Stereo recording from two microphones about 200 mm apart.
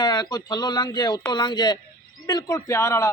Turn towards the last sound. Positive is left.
turn(degrees=15)  # may be behind; listen again after turning